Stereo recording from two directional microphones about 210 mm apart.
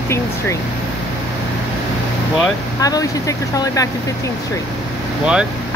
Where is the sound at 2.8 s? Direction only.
15° left (ahead or behind).